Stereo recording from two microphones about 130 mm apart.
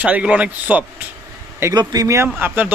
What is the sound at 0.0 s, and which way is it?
A man's voice, 10° right (ahead or behind).